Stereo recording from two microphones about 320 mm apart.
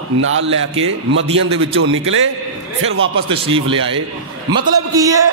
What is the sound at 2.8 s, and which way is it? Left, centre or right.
Speech, right.